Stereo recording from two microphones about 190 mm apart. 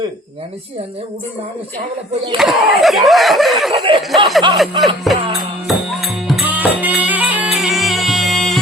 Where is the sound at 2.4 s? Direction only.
Centre (ahead or behind).